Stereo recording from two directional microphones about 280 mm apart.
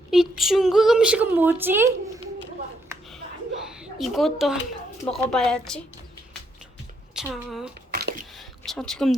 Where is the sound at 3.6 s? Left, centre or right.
Centre.